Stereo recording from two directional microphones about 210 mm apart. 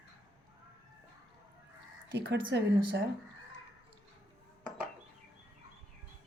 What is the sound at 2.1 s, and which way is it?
Speech, 55° right (ahead or behind).